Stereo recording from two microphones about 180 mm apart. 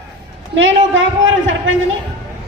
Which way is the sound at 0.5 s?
90° right.